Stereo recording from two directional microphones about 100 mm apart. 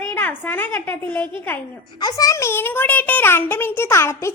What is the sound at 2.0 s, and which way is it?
A child's voice, 40° left (ahead or behind).